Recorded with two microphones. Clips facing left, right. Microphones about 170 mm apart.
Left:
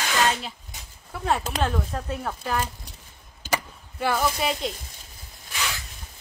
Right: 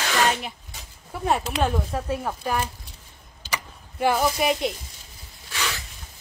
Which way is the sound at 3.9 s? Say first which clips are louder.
Right 3 dB; 15° right (ahead or behind).